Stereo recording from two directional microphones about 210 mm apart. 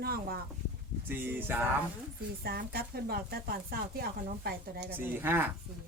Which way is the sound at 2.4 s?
45° right (ahead or behind).